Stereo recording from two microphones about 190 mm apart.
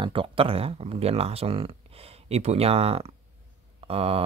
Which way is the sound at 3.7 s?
30° right (ahead or behind).